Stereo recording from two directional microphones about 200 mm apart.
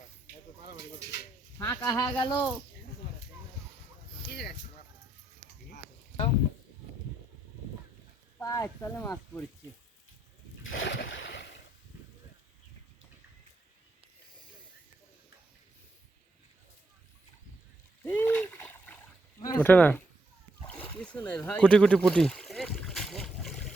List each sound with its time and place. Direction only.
0.7 s speech: 55° left (ahead or behind)
1.5 s speech: 15° left (ahead or behind)
4.3 s speech: 55° left (ahead or behind)
8.4 s speech: 15° left (ahead or behind)
10.6 s splash: 75° left (ahead or behind)
18.0 s splash: 10° left (ahead or behind)
19.4 s speech: 10° left (ahead or behind)
20.7 s a sound: 5° left (ahead or behind)